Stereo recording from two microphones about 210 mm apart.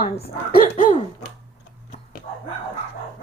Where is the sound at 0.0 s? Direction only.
45° left (ahead or behind).